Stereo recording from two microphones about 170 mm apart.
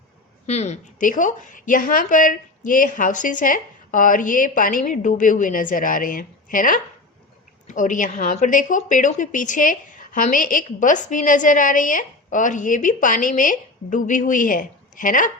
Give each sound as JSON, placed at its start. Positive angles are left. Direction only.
{"t": 0.4, "sound": "a woman's voice", "side_deg": 40}